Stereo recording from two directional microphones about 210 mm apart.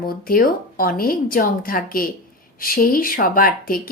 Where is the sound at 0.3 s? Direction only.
45° left (ahead or behind).